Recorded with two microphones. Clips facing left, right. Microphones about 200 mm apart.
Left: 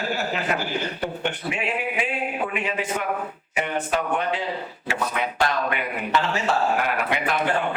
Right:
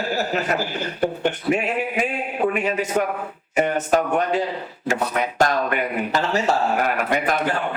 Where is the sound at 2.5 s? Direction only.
40° right (ahead or behind).